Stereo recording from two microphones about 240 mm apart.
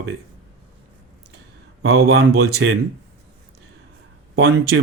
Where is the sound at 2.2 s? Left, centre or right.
Right.